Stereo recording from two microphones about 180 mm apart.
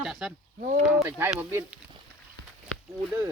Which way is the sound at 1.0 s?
10° right (ahead or behind).